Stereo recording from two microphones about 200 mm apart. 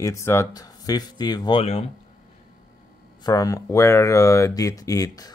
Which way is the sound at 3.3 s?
20° left (ahead or behind).